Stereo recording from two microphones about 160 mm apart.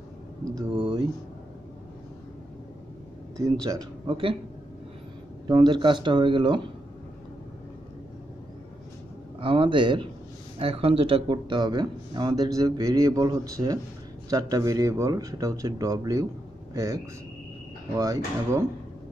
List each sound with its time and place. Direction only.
0.6 s a sound: 25° right (ahead or behind)
3.3 s speech: 20° right (ahead or behind)
5.5 s speech: 30° right (ahead or behind)
9.4 s speech: 35° right (ahead or behind)